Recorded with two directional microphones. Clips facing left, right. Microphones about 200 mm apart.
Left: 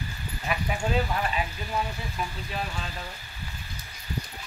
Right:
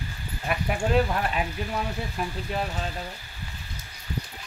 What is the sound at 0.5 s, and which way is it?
Speech, 55° right (ahead or behind).